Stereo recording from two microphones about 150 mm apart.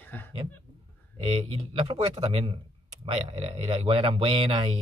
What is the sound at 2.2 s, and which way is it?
Speech, 40° right (ahead or behind).